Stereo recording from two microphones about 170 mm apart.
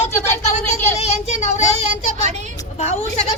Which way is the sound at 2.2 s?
40° right (ahead or behind).